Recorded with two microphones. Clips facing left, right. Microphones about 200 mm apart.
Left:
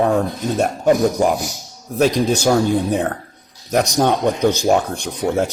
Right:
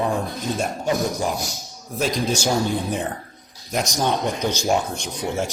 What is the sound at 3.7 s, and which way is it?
A man's voice, 60° left (ahead or behind).